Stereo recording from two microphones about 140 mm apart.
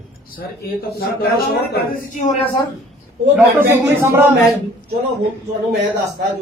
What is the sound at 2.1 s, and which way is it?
Speech, 60° left (ahead or behind).